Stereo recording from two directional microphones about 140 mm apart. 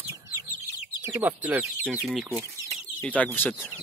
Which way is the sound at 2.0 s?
Centre (ahead or behind).